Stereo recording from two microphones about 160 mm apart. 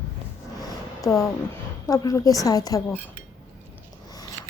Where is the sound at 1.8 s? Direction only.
20° left (ahead or behind).